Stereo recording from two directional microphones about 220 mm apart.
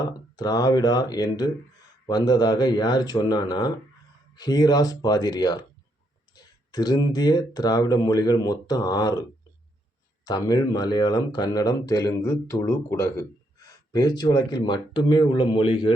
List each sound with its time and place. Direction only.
0.0 s speech: 20° left (ahead or behind)
10.2 s speech: 15° left (ahead or behind)